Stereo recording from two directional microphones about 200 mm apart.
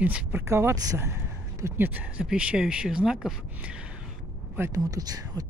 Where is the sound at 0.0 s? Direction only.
10° right (ahead or behind).